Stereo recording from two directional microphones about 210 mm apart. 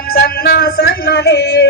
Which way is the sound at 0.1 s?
50° left (ahead or behind).